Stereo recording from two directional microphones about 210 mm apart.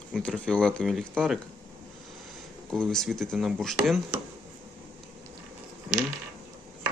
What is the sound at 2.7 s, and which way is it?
Speech, centre (ahead or behind).